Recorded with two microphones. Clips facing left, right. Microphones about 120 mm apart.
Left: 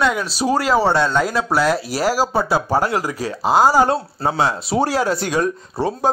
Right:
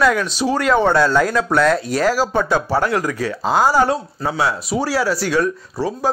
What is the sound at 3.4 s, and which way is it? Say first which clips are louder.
Speech: left 2 dB; 15° left (ahead or behind).